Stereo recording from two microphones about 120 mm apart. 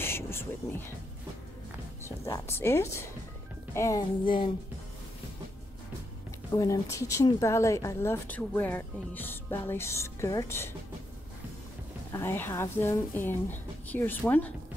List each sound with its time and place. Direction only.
0.0 s a sound: 20° left (ahead or behind)
2.0 s speech: 20° left (ahead or behind)
6.5 s speech: 30° left (ahead or behind)
12.1 s speech: 20° left (ahead or behind)